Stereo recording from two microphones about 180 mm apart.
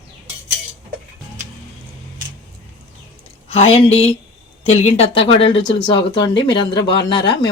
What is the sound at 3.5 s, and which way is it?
Speech, 35° left (ahead or behind).